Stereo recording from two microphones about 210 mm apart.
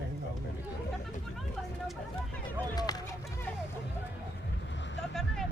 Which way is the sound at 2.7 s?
20° left (ahead or behind).